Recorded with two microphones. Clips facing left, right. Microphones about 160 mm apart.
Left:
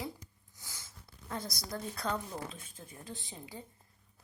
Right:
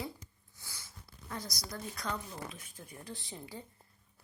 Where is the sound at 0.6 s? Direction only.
20° left (ahead or behind).